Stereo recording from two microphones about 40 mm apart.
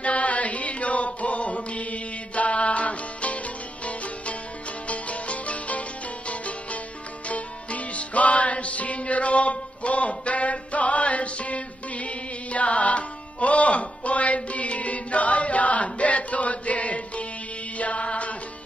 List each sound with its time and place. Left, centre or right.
0.0 s music: left
4.8 s music: left